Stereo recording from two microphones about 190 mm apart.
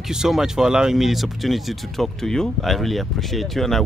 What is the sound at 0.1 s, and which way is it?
Speech, 5° right (ahead or behind).